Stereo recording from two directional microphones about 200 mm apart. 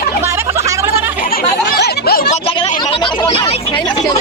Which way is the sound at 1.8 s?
50° left (ahead or behind).